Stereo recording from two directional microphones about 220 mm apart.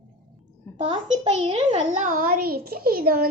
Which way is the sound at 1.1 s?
25° right (ahead or behind).